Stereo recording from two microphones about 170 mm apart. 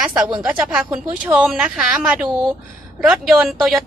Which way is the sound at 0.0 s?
5° right (ahead or behind).